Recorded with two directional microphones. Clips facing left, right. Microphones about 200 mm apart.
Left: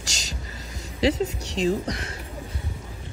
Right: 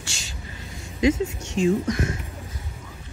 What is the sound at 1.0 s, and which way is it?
Speech, 35° left (ahead or behind).